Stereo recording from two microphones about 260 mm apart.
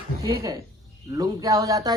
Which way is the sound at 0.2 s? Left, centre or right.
Centre.